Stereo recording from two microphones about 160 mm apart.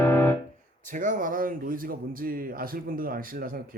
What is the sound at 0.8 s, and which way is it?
A man's voice, 55° right (ahead or behind).